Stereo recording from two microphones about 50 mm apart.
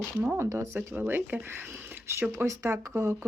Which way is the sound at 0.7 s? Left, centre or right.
Right.